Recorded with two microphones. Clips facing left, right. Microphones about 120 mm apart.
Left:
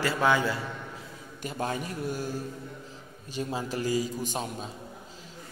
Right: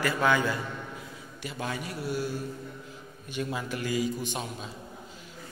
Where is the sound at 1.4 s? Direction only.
45° left (ahead or behind).